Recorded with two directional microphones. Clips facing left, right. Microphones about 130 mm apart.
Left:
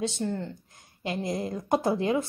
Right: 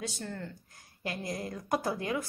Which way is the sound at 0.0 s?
25° left (ahead or behind).